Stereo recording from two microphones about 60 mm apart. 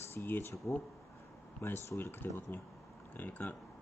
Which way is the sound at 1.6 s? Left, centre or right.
Left.